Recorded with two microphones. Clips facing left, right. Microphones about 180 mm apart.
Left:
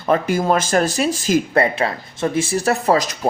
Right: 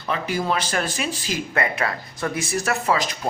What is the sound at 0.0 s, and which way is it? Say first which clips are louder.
Speech: left 7 dB; 45° left (ahead or behind).